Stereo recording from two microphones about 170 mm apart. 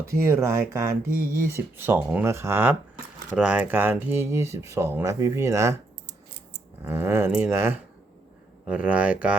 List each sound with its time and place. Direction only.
0.0 s speech: 15° right (ahead or behind)
6.8 s speech: 15° right (ahead or behind)